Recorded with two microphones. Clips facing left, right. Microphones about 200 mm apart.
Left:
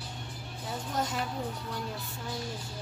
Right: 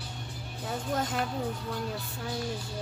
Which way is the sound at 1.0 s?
55° right (ahead or behind).